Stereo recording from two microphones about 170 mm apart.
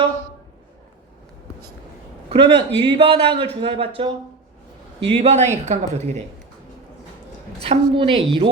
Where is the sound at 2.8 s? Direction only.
35° right (ahead or behind).